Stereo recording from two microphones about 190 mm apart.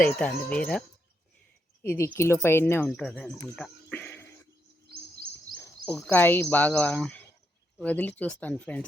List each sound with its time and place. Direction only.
0.2 s speech: 5° left (ahead or behind)
3.5 s a sound: 5° left (ahead or behind)
4.9 s chirp: 50° right (ahead or behind)
5.5 s speech: 5° left (ahead or behind)